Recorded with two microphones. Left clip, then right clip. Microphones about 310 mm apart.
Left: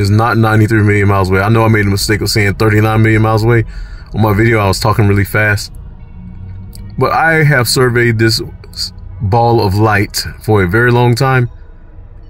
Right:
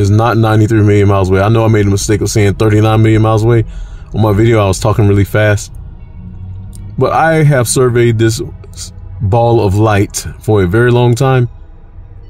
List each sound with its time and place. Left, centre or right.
0.1 s speech: centre
7.0 s speech: centre